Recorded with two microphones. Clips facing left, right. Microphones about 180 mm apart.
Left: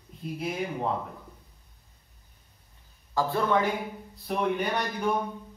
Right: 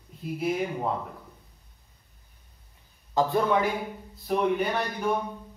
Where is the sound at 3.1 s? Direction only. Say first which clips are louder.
Right 2 dB; 15° right (ahead or behind).